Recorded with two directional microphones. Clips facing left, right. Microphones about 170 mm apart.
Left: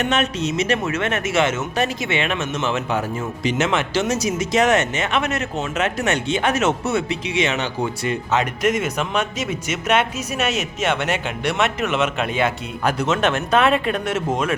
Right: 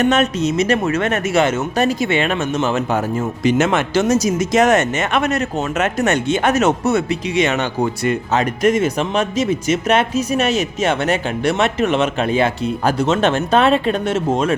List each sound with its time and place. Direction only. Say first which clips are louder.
0.0 s speech: right 5 dB; 40° right (ahead or behind)